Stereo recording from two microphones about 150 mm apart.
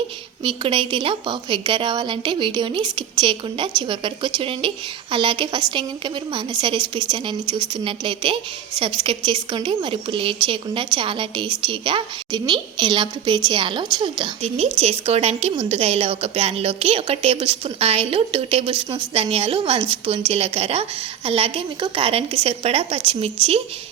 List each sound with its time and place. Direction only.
0.4 s a woman's voice: 35° right (ahead or behind)